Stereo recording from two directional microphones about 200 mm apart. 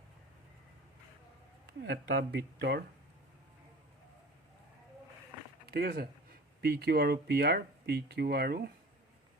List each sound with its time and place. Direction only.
1.8 s speech: 60° right (ahead or behind)
5.6 s speech: 50° right (ahead or behind)